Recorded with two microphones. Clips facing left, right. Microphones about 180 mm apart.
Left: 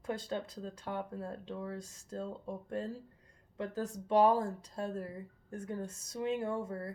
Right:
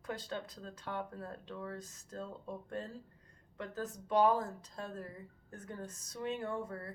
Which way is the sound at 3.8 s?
30° left (ahead or behind).